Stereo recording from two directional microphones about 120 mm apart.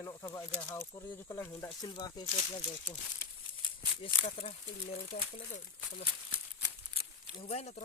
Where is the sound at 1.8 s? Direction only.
35° left (ahead or behind).